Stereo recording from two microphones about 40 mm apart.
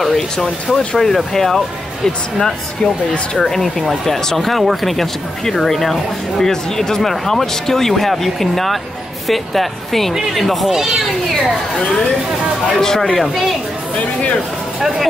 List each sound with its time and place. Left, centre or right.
0.0 s speech: centre
10.7 s speech: centre
12.8 s speech: centre